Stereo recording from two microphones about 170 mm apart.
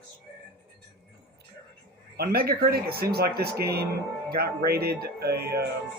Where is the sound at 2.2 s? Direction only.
60° right (ahead or behind).